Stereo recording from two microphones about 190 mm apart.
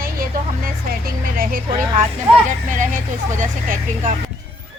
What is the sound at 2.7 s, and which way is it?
Speech, 40° right (ahead or behind).